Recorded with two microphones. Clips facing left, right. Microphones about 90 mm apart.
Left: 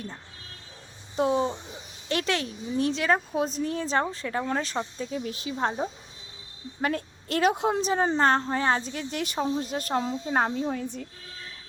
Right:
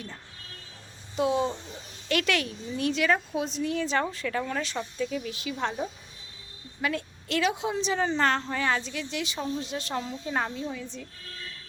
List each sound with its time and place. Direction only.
1.1 s speech: 40° left (ahead or behind)
1.5 s a woman's voice: 25° left (ahead or behind)
6.8 s a woman's voice: 40° left (ahead or behind)
9.9 s a woman's voice: 25° left (ahead or behind)
10.7 s speech: 50° left (ahead or behind)